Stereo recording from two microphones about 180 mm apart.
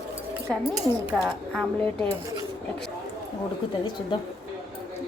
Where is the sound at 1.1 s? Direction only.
Centre (ahead or behind).